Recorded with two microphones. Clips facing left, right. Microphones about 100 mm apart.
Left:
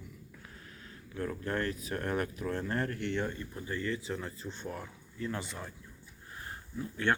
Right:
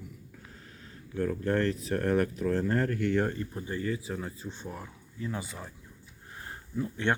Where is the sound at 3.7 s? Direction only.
15° right (ahead or behind).